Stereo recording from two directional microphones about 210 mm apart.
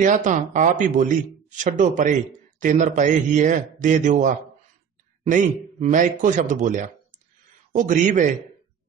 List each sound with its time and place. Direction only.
0.0 s speech: 35° right (ahead or behind)